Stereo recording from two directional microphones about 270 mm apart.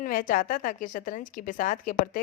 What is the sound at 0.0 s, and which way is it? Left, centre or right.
A woman's voice, left.